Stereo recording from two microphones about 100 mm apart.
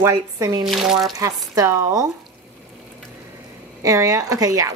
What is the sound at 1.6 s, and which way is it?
Speech, 30° right (ahead or behind).